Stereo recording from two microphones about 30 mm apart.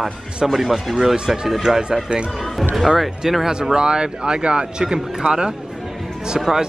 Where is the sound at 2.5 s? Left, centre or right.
Centre.